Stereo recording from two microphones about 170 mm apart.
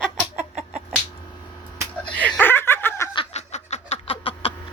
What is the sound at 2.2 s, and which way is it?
Snicker, 10° left (ahead or behind).